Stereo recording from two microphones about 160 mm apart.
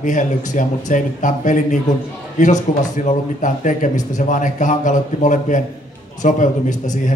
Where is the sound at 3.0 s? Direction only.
50° left (ahead or behind).